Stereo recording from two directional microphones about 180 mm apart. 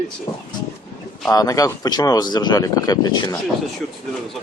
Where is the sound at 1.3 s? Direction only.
20° left (ahead or behind).